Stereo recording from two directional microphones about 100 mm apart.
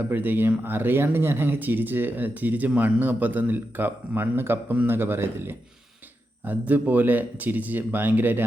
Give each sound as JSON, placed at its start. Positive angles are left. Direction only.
{"t": 0.1, "sound": "speech", "side_deg": -20}